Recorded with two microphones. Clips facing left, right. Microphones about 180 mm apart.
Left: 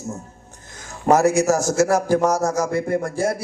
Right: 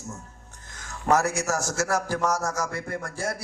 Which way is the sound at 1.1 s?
10° left (ahead or behind).